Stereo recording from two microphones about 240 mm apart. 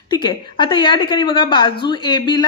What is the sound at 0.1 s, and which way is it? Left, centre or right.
A woman's voice, centre.